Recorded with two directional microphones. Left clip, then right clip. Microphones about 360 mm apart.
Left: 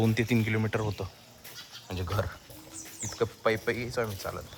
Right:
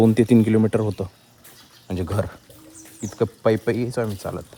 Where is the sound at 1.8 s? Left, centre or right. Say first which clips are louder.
Right 7 dB; centre.